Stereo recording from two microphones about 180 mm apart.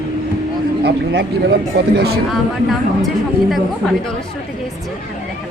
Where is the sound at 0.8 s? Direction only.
65° right (ahead or behind).